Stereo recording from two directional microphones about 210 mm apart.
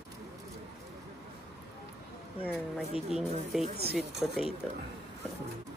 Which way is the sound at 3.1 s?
Centre (ahead or behind).